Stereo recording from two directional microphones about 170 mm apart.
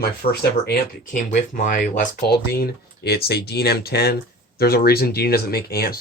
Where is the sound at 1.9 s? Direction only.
65° left (ahead or behind).